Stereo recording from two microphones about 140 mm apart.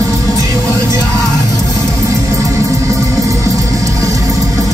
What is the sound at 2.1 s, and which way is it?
Music, 20° right (ahead or behind).